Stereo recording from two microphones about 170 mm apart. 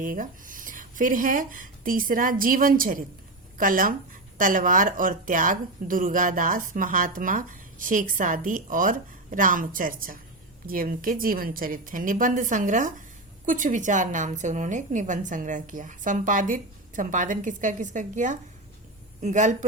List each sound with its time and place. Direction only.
0.0 s speech: 50° right (ahead or behind)